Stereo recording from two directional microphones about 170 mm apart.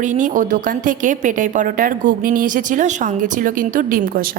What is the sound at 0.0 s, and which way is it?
A woman's voice, 45° right (ahead or behind).